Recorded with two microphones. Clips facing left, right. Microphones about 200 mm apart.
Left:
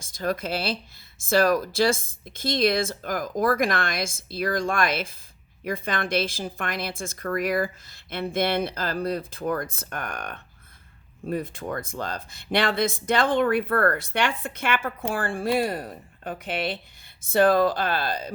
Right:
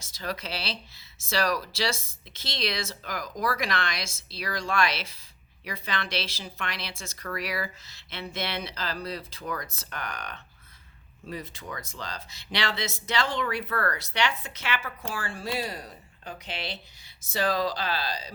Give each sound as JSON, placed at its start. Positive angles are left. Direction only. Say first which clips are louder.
{"t": 0.0, "sound": "speech", "louder": "left 7 dB", "side_deg": 50}